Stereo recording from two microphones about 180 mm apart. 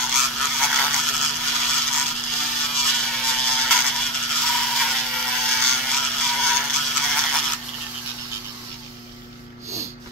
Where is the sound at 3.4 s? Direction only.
5° left (ahead or behind).